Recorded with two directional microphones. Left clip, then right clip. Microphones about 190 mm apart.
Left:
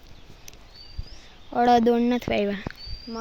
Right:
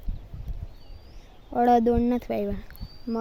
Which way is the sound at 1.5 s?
15° right (ahead or behind).